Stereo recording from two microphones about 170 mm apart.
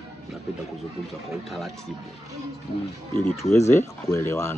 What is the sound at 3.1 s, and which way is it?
Speech, 15° left (ahead or behind).